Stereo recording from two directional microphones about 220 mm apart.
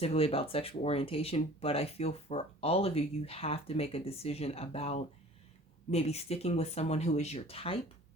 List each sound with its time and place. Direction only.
0.0 s speech: 25° left (ahead or behind)